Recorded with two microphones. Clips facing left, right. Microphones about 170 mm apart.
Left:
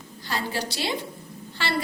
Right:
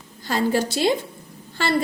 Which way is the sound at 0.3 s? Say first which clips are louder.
Right 8 dB; 45° right (ahead or behind).